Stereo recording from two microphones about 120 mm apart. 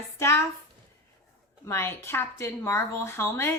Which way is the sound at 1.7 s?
20° left (ahead or behind).